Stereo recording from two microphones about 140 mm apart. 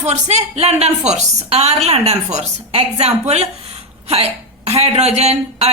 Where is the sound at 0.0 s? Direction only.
55° right (ahead or behind).